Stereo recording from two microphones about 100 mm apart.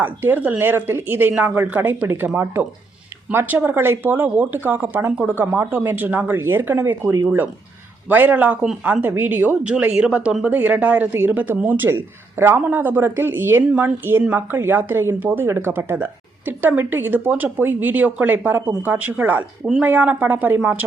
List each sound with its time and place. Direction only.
0.0 s a woman's voice: 15° right (ahead or behind)